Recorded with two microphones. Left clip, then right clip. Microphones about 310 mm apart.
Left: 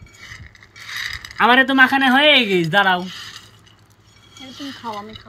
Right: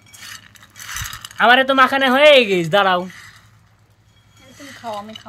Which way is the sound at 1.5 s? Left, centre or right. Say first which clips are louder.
Right 1 dB; centre.